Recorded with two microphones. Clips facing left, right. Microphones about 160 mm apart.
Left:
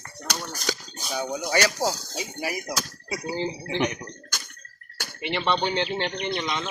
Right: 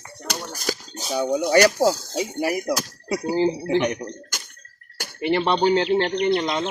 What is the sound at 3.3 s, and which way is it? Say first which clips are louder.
Speech: right 9 dB; 40° right (ahead or behind).